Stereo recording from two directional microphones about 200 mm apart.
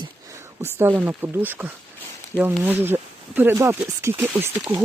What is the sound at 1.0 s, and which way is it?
Speech, 10° right (ahead or behind).